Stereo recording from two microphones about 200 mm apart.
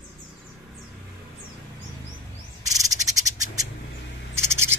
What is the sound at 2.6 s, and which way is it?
Frog, 15° right (ahead or behind).